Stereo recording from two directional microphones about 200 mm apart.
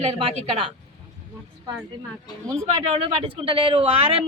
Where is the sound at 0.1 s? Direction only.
30° right (ahead or behind).